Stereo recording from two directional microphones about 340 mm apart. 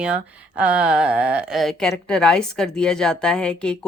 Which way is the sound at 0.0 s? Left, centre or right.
Centre.